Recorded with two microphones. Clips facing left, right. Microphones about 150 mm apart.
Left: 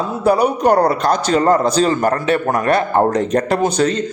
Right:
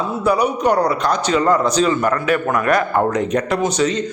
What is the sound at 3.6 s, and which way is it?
Speech, 50° left (ahead or behind).